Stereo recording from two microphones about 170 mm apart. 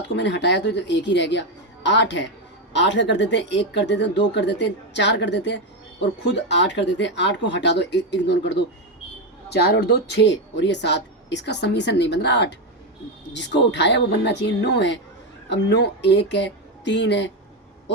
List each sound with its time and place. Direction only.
0.1 s speech: 90° left
9.5 s speech: 75° left (ahead or behind); by 17.3 s 90° left